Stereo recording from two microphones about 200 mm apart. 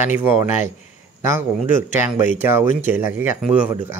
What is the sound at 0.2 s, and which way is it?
Speech, 10° right (ahead or behind).